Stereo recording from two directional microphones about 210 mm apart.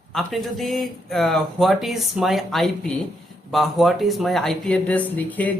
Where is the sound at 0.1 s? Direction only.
Centre (ahead or behind).